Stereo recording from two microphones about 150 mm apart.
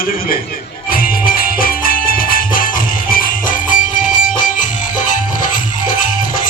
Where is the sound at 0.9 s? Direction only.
70° left (ahead or behind).